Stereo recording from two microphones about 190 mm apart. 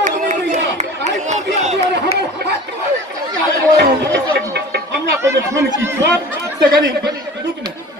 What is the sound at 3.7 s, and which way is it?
Music, 65° right (ahead or behind).